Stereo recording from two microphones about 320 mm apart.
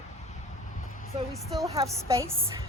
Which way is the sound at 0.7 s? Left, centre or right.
Left.